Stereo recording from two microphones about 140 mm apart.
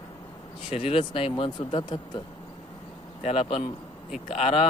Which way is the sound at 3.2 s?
45° left (ahead or behind).